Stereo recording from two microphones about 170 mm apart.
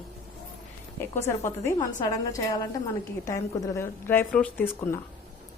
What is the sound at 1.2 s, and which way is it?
A woman's voice, 15° left (ahead or behind).